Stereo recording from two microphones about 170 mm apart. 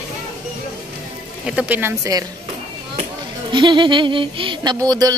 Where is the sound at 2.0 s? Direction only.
20° right (ahead or behind).